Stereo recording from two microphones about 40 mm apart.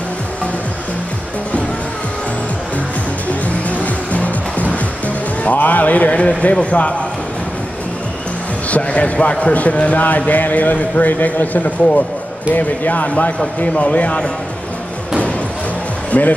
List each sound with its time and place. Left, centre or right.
3.7 s vehicle: left
4.7 s music: left
6.5 s a man's voice: left
8.6 s speech: left
16.1 s speech: left